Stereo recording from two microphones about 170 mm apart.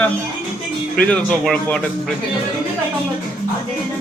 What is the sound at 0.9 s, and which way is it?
Speech, 5° left (ahead or behind).